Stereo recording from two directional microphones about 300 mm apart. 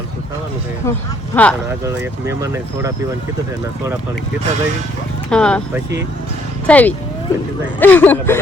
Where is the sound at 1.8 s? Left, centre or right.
Centre.